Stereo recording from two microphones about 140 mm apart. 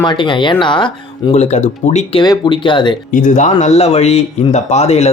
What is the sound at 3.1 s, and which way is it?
A man's voice, 65° left (ahead or behind).